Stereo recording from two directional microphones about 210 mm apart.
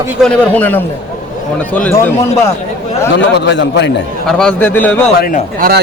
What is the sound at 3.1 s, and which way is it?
Speech, 55° left (ahead or behind).